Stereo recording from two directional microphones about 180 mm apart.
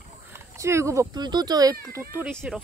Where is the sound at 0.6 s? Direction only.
15° right (ahead or behind).